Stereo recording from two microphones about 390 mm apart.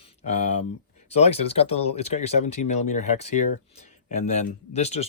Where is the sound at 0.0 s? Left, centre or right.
Centre.